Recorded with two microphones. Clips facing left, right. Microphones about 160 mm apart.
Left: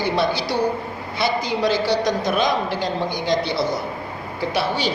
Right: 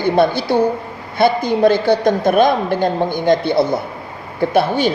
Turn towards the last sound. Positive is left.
turn(degrees=-50)  # may be behind; listen again after turning